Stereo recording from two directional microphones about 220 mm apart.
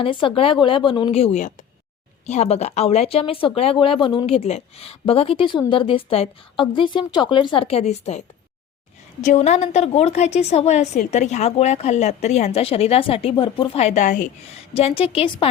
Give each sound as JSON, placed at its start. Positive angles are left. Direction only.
{"t": 0.0, "sound": "a woman's voice", "side_deg": 25}
{"t": 9.2, "sound": "a woman's voice", "side_deg": 30}